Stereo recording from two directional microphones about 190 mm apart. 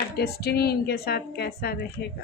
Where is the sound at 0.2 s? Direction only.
55° left (ahead or behind).